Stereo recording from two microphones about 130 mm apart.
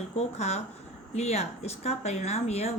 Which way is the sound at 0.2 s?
60° left (ahead or behind).